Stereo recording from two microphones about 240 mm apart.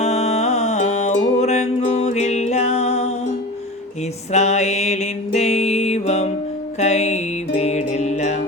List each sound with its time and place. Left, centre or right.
0.0 s music: left
4.3 s music: left